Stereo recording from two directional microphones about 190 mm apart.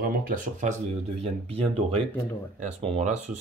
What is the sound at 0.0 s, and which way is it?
Speech, 40° right (ahead or behind).